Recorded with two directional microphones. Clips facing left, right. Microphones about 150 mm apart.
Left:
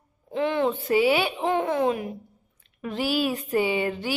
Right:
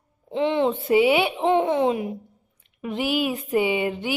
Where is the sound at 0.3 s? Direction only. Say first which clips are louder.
Right 2 dB; 25° right (ahead or behind).